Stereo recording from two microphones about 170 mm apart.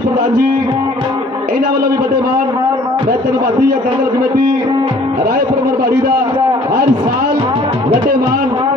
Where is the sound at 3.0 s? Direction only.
65° right (ahead or behind).